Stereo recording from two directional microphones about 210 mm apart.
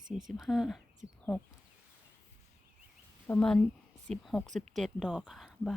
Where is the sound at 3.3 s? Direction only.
5° left (ahead or behind).